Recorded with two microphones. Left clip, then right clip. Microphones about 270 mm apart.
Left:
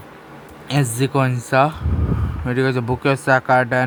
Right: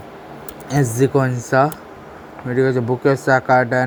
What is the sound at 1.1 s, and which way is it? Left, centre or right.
Speech, left.